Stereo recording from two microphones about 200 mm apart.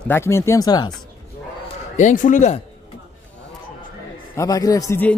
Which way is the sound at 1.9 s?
40° left (ahead or behind).